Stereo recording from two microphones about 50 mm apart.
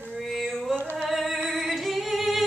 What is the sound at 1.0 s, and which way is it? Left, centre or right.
Music, centre.